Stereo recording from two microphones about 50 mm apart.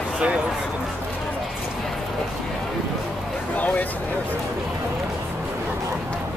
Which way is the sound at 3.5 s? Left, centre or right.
Left.